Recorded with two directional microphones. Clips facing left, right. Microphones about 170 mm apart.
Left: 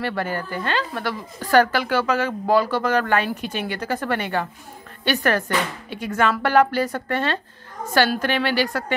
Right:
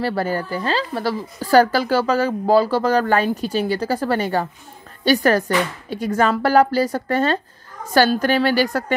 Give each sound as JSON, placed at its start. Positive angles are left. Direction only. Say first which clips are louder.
{"t": 0.0, "sound": "a woman's voice", "louder": "right 4 dB", "side_deg": -35}